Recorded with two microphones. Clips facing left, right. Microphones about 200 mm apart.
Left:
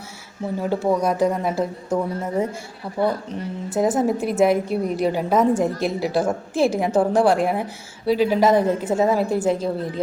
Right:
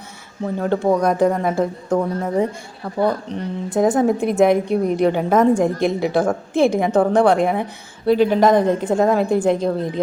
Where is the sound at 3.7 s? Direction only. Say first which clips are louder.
Right 3 dB; 5° left (ahead or behind).